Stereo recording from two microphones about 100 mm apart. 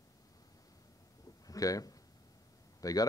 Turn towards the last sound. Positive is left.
turn(degrees=35)  # may be behind; listen again after turning